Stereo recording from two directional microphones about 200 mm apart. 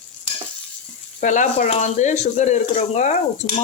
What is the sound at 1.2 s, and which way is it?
Speech, 40° left (ahead or behind).